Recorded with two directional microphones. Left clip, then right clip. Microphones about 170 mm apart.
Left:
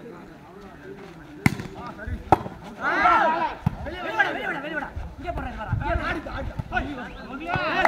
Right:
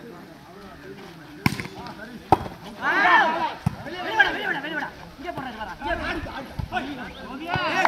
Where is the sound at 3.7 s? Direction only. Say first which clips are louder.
Even; 20° right (ahead or behind).